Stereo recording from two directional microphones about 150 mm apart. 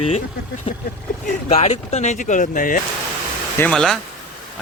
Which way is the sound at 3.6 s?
5° left (ahead or behind).